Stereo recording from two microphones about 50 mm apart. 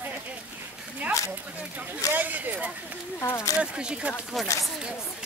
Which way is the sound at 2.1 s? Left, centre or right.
Right.